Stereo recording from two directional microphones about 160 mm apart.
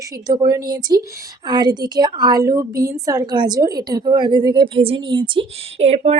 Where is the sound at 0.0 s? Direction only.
20° right (ahead or behind).